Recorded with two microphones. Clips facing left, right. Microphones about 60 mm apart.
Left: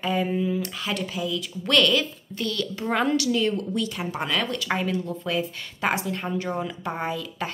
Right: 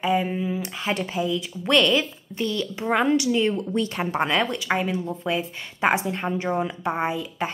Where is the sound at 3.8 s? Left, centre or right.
Right.